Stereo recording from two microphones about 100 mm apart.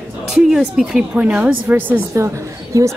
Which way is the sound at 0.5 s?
5° right (ahead or behind).